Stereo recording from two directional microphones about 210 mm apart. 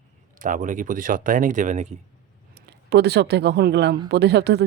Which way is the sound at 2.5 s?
50° right (ahead or behind).